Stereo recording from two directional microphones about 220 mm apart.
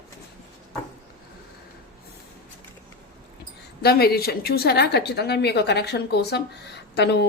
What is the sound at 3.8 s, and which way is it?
A woman's voice, 45° left (ahead or behind).